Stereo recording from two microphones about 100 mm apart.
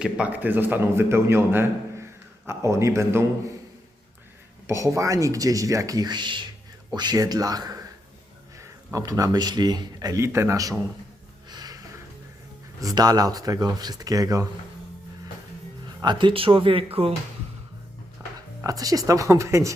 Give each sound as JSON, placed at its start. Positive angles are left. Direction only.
{"t": 0.0, "sound": "a man's voice", "side_deg": -15}
{"t": 4.6, "sound": "a man's voice", "side_deg": -30}
{"t": 10.2, "sound": "a man's voice", "side_deg": -25}
{"t": 11.4, "sound": "music", "side_deg": -45}
{"t": 12.8, "sound": "speech", "side_deg": -40}
{"t": 16.0, "sound": "speech", "side_deg": -50}
{"t": 18.2, "sound": "music", "side_deg": -25}
{"t": 18.6, "sound": "speech", "side_deg": -35}